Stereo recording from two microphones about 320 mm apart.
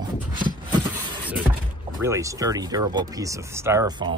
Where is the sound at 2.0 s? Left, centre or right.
Centre.